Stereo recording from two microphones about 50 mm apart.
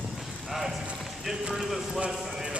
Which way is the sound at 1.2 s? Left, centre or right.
Centre.